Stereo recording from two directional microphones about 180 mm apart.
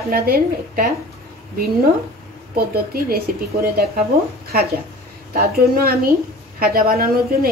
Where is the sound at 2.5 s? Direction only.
60° right (ahead or behind).